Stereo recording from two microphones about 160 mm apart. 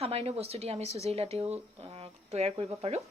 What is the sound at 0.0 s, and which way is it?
A woman's voice, 40° right (ahead or behind).